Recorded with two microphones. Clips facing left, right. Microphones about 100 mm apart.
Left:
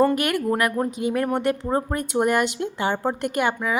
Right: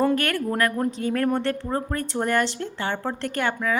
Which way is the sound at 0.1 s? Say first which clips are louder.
Left 2 dB; 15° left (ahead or behind).